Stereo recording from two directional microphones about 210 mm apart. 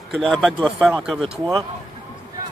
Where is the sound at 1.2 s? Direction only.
20° right (ahead or behind).